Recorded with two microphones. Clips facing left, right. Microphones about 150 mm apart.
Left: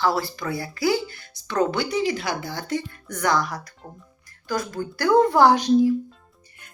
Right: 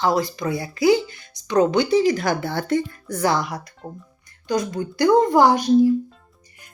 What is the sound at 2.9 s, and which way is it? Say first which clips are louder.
A woman's voice: right 2 dB; 30° right (ahead or behind).